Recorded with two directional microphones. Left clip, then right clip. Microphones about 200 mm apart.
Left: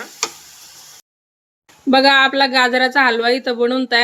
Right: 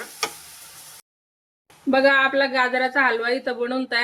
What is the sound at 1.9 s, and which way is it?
A woman's voice, 45° left (ahead or behind).